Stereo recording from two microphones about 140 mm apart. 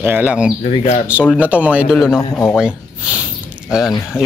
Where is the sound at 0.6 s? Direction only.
50° left (ahead or behind).